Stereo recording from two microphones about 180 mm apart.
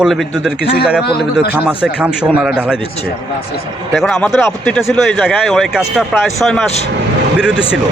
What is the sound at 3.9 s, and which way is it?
Speech, centre (ahead or behind).